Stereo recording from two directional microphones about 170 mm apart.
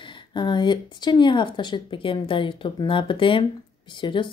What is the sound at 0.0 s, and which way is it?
A woman's voice, 25° left (ahead or behind).